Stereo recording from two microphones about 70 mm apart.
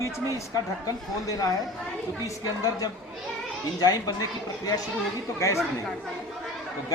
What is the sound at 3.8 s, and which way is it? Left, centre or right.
Speech, left.